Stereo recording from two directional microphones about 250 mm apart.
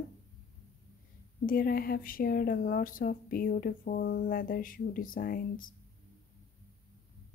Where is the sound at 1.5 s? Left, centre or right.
Left.